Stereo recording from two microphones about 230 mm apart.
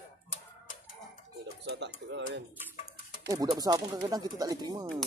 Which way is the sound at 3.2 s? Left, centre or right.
Centre.